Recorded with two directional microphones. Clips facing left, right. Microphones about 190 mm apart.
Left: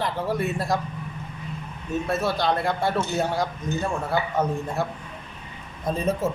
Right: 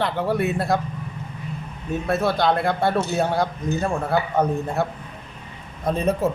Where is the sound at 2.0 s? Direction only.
60° right (ahead or behind).